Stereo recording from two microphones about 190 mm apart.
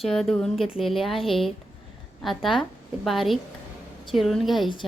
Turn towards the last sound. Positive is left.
turn(degrees=0)  # may be behind; listen again after turning